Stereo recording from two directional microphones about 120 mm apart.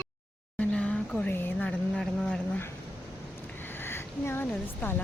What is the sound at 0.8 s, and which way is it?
Vehicle, 10° left (ahead or behind).